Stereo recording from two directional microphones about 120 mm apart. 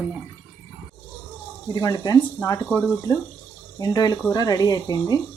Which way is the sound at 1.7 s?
30° left (ahead or behind).